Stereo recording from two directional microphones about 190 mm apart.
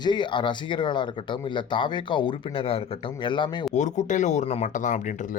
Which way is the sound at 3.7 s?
40° left (ahead or behind).